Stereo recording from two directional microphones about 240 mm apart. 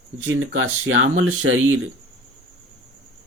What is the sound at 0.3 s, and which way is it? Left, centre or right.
Speech, right.